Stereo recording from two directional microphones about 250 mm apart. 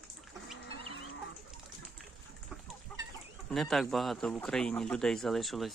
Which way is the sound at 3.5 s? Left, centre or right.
Centre.